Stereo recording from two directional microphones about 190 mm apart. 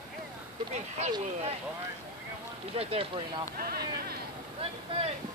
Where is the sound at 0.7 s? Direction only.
35° right (ahead or behind).